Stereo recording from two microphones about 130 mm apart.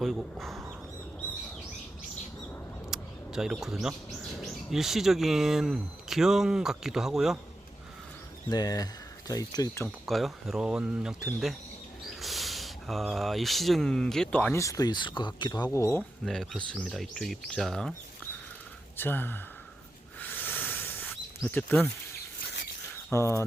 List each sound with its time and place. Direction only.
0.0 s speech: centre (ahead or behind)
2.9 s a sound: 5° right (ahead or behind)
4.2 s speech: centre (ahead or behind)
8.4 s speech: 30° left (ahead or behind)
10.1 s speech: centre (ahead or behind)
14.5 s speech: 25° left (ahead or behind)
16.2 s speech: centre (ahead or behind)
18.9 s speech: 15° left (ahead or behind)
20.1 s snake: 15° left (ahead or behind)
23.1 s speech: 20° left (ahead or behind)